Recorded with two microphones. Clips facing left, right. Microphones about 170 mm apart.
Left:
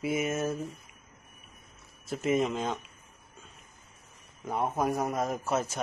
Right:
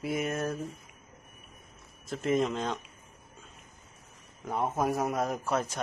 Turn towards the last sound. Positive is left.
turn(degrees=5)  # may be behind; listen again after turning